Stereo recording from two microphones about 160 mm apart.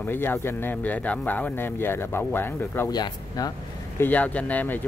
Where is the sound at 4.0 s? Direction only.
10° left (ahead or behind).